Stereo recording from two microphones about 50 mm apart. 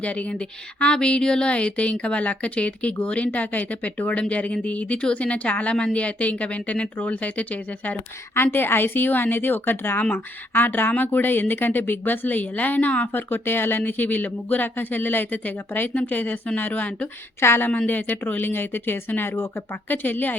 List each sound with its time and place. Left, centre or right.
0.0 s a woman's voice: left
8.4 s a woman's voice: left
17.4 s a woman's voice: left
17.8 s a woman's voice: left